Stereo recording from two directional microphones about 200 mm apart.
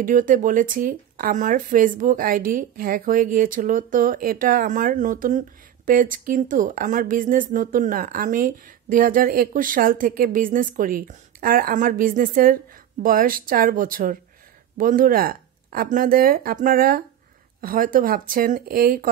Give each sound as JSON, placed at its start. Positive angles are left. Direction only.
{"t": 0.0, "sound": "speech", "side_deg": -40}